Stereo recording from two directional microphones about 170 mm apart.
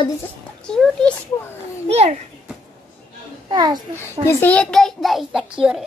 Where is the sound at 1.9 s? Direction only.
40° right (ahead or behind).